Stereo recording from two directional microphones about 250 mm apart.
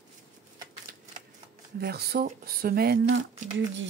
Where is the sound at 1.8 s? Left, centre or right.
Right.